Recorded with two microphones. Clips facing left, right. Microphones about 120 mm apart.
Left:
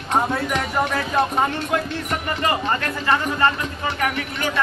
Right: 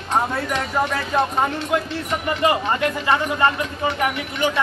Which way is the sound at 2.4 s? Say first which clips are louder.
Right 4 dB; 15° right (ahead or behind).